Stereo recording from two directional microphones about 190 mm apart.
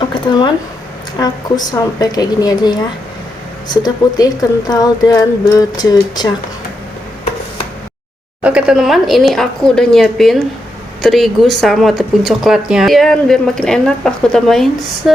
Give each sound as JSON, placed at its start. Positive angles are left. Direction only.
{"t": 0.1, "sound": "a sound", "side_deg": 25}
{"t": 1.2, "sound": "a woman's voice", "side_deg": 20}
{"t": 8.4, "sound": "speech", "side_deg": -5}